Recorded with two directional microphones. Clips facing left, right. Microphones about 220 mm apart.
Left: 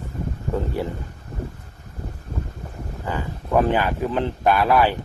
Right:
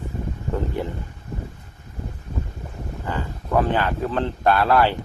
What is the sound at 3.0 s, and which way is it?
Speech, 15° left (ahead or behind).